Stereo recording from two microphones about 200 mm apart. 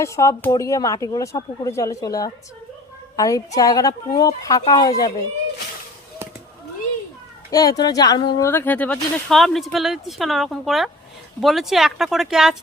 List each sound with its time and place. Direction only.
0.0 s a woman's voice: 15° left (ahead or behind)
7.5 s speech: 20° left (ahead or behind)
8.4 s speech: 10° left (ahead or behind)